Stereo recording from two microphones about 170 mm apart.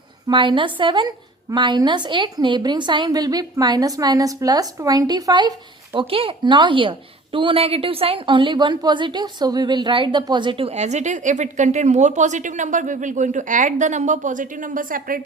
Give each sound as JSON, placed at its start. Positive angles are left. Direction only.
{"t": 0.3, "sound": "a woman's voice", "side_deg": -30}